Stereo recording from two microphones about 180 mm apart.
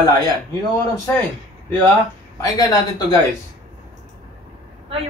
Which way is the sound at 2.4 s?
20° left (ahead or behind).